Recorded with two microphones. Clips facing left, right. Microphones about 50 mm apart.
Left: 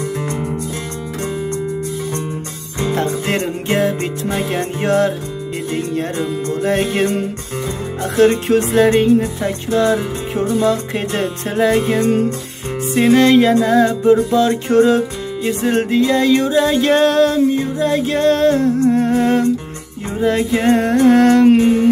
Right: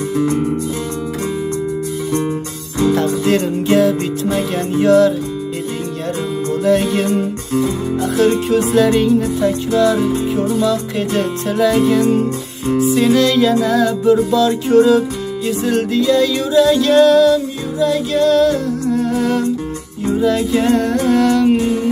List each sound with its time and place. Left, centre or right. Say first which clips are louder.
2.8 s music: right 4 dB; left
6.6 s music: right 2 dB; left
7.5 s speech: right 9 dB; left
8.7 s music: left 1 dB; left